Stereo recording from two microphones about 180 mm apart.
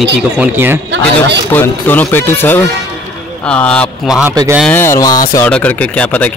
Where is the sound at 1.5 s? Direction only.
10° left (ahead or behind).